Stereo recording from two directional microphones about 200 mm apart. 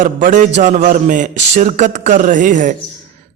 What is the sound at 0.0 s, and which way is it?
A man's voice, 40° right (ahead or behind).